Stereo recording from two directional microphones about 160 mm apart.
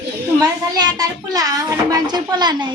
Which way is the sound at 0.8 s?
25° right (ahead or behind).